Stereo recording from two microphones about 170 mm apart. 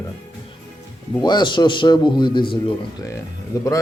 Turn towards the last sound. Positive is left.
turn(degrees=20)  # may be behind; listen again after turning